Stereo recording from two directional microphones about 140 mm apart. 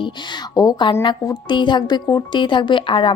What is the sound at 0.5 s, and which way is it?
A woman's voice, 25° left (ahead or behind).